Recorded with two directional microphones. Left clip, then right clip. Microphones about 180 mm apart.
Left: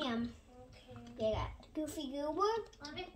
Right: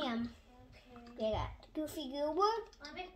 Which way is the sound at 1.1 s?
40° right (ahead or behind).